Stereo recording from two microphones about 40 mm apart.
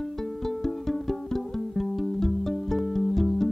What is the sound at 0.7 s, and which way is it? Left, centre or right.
Music, centre.